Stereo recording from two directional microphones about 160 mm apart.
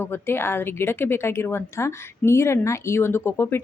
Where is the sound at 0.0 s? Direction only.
15° left (ahead or behind).